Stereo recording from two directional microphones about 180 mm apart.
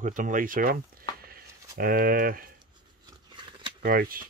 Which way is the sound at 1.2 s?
55° right (ahead or behind).